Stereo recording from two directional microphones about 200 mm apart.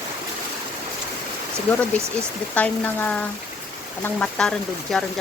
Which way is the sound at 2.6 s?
10° left (ahead or behind).